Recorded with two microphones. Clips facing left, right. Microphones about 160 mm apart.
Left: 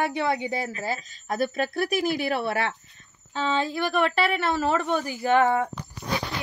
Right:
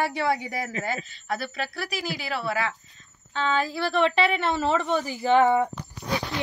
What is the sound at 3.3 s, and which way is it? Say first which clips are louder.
Speech: even; 35° left (ahead or behind).